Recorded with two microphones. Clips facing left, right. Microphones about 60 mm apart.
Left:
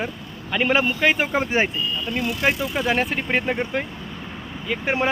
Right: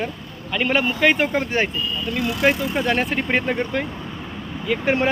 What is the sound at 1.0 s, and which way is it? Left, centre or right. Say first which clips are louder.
Speech: right 2 dB; centre.